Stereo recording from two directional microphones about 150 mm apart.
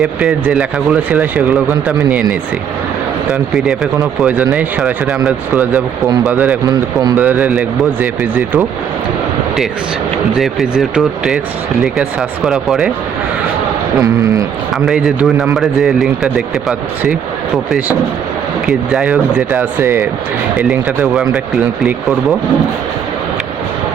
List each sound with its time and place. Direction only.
0.0 s speech: 5° right (ahead or behind)
3.2 s speech: centre (ahead or behind)
10.3 s speech: centre (ahead or behind)
14.0 s speech: 20° right (ahead or behind)
14.8 s speech: 5° right (ahead or behind)
19.8 s speech: 20° right (ahead or behind)
20.6 s speech: 5° right (ahead or behind)